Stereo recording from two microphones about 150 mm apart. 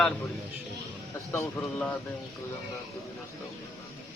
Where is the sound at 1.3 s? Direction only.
20° left (ahead or behind).